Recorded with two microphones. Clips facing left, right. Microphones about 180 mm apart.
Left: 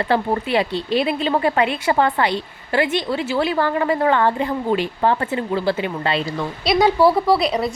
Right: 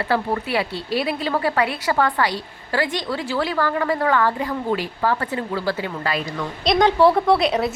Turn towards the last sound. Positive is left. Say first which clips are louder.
# even
turn(degrees=0)  # may be behind; listen again after turning